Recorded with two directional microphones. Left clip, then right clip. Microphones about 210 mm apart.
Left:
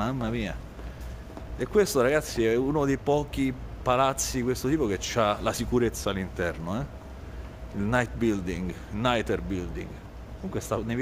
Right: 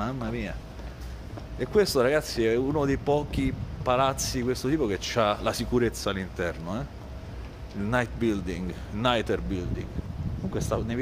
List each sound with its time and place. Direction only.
0.0 s speech: 20° left (ahead or behind)
1.6 s speech: 5° left (ahead or behind)